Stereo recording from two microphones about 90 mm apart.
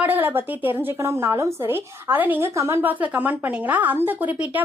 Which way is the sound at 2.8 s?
20° right (ahead or behind).